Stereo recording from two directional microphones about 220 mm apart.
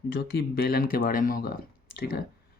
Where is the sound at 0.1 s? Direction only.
45° left (ahead or behind).